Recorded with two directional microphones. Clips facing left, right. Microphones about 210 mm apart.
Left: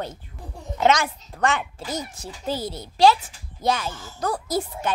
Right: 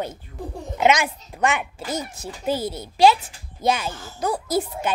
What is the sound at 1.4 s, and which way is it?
Speech, 10° right (ahead or behind).